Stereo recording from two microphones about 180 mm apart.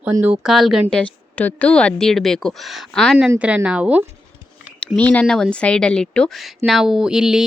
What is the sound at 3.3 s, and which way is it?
Speech, 5° right (ahead or behind).